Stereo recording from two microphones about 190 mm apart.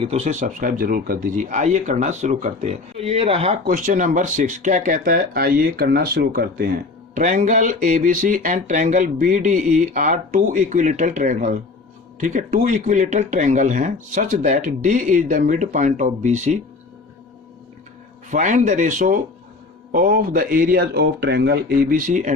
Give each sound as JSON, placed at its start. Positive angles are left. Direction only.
{"t": 0.0, "sound": "speech", "side_deg": -35}
{"t": 3.7, "sound": "speech", "side_deg": -40}
{"t": 18.3, "sound": "speech", "side_deg": -40}